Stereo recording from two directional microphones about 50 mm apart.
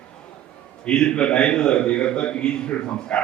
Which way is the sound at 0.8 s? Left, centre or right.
Centre.